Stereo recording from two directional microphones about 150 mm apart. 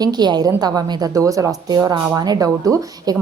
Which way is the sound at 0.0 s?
25° right (ahead or behind).